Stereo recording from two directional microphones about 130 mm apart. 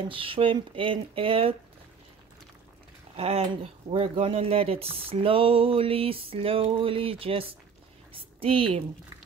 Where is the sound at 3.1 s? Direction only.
50° right (ahead or behind).